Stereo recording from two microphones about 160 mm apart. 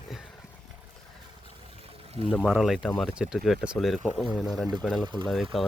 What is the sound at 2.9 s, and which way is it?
Speech, 10° left (ahead or behind).